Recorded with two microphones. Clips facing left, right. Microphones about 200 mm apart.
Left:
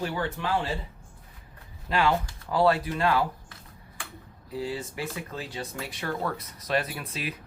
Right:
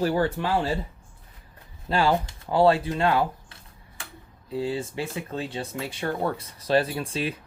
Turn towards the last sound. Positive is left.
turn(degrees=-30)  # may be behind; listen again after turning